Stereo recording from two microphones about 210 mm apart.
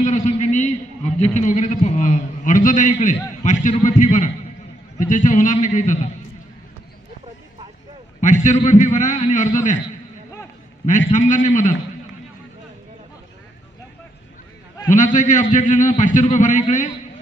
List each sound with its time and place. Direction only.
0.0 s a man's voice: 35° left (ahead or behind)
8.2 s a man's voice: 35° left (ahead or behind)
10.9 s a man's voice: 35° left (ahead or behind)
14.9 s a man's voice: 35° left (ahead or behind)